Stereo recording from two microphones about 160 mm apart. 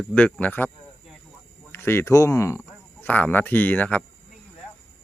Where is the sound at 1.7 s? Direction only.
15° left (ahead or behind).